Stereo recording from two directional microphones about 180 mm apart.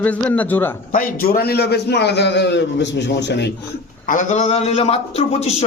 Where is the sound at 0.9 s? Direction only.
55° left (ahead or behind); by 3.5 s 75° left (ahead or behind).